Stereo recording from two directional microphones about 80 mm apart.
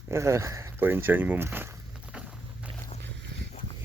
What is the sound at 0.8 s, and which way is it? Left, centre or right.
Speech, right.